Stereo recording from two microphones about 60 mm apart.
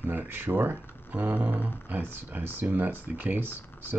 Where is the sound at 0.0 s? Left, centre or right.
Right.